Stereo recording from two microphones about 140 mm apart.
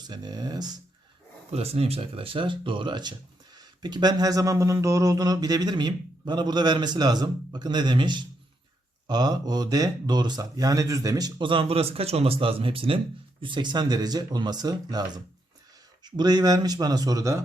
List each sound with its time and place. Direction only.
0.1 s speech: 30° right (ahead or behind)
1.5 s speech: 45° right (ahead or behind); by 17.4 s 25° right (ahead or behind)